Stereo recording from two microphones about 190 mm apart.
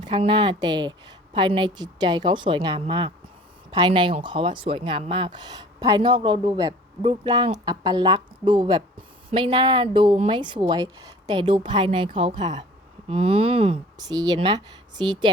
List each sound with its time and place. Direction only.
0.0 s speech: 25° right (ahead or behind)